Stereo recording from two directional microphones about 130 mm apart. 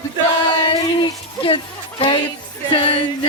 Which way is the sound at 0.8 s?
40° left (ahead or behind).